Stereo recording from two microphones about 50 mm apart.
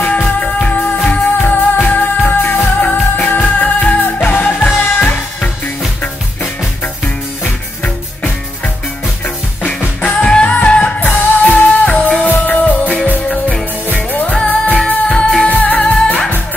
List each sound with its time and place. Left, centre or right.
0.0 s music: left
1.4 s music: left
10.0 s music: left